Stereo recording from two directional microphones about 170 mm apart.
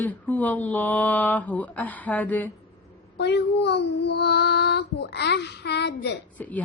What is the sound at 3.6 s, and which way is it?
Child singing, 80° left.